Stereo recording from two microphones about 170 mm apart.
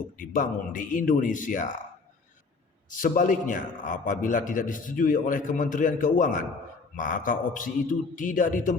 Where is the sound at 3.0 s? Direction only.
55° left (ahead or behind).